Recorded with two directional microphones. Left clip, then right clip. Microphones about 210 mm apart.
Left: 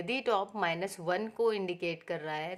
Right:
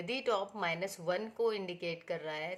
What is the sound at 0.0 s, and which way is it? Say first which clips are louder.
Speech: left 3 dB; 30° left (ahead or behind).